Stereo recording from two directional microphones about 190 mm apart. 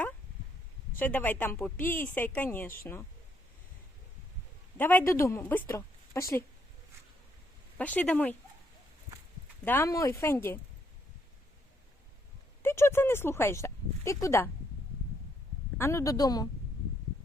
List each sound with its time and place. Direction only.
0.9 s a woman's voice: 10° left (ahead or behind)
4.8 s a woman's voice: 10° left (ahead or behind)
7.8 s a woman's voice: 5° left (ahead or behind)
9.6 s a woman's voice: 15° left (ahead or behind)
12.6 s speech: 15° left (ahead or behind)
15.8 s a woman's voice: 15° left (ahead or behind)